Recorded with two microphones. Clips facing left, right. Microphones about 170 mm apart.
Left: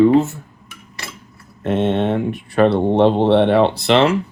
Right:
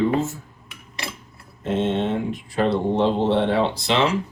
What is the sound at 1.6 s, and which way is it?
Speech, 65° left (ahead or behind).